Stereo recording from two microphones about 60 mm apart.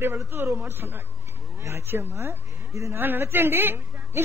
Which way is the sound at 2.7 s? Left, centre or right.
Right.